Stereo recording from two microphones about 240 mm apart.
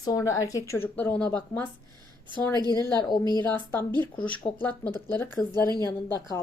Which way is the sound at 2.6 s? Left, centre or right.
Centre.